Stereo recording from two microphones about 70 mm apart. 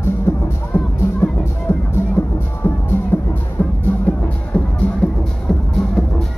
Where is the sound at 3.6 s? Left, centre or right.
Left.